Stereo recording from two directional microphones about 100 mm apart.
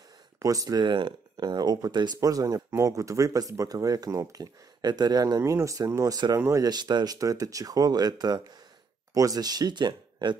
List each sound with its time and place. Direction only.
0.4 s speech: 35° right (ahead or behind)
5.4 s speech: 30° right (ahead or behind)